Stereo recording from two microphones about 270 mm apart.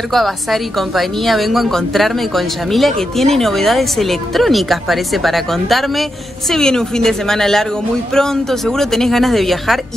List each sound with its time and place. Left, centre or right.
0.1 s a woman's voice: centre